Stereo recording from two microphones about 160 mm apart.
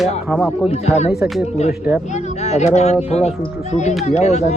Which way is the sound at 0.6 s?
40° left (ahead or behind).